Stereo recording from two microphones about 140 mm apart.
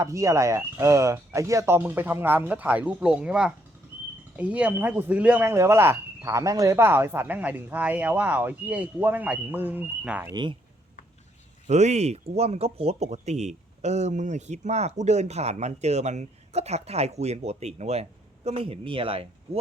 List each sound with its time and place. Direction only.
0.0 s speech: 20° right (ahead or behind)
11.7 s speech: 55° right (ahead or behind)